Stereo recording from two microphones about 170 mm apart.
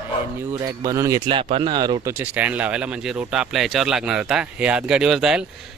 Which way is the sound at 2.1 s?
10° right (ahead or behind).